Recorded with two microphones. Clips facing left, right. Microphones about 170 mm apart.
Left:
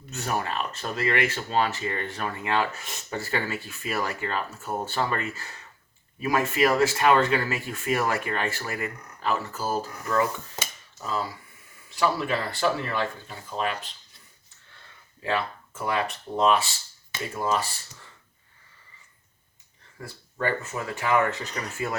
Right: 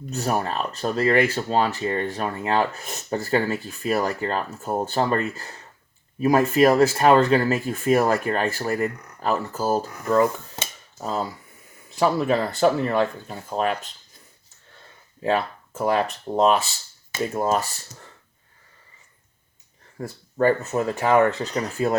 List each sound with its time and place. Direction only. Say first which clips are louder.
0.1 s speech: right 5 dB; 35° right (ahead or behind)
10.6 s dishes: right 4 dB; 35° right (ahead or behind)
11.9 s speech: right 5 dB; 45° right (ahead or behind)
15.2 s speech: right 5 dB; 40° right (ahead or behind)
20.0 s speech: right 9 dB; 40° right (ahead or behind)